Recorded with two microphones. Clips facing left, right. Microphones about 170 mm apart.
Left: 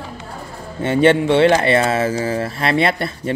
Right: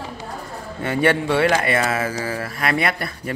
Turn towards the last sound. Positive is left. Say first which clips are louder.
# left 5 dB
turn(degrees=25)  # may be behind; listen again after turning